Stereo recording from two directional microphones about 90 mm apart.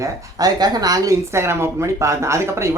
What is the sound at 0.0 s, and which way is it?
Speech, 45° right (ahead or behind).